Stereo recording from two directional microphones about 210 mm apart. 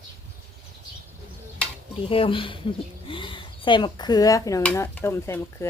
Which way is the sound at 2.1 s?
25° left (ahead or behind).